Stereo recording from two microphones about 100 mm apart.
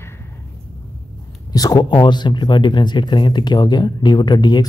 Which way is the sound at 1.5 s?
40° left (ahead or behind).